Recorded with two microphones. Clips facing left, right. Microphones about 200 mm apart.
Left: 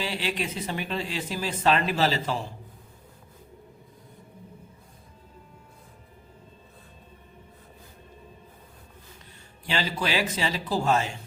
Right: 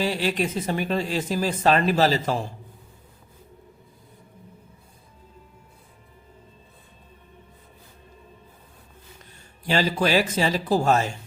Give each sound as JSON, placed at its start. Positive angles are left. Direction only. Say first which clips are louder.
{"t": 0.0, "sound": "speech", "louder": "right 6 dB", "side_deg": -45}
{"t": 9.6, "sound": "speech", "louder": "right 6 dB", "side_deg": -45}